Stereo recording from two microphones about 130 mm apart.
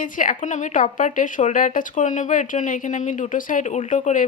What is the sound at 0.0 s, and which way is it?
A woman's voice, 90° left.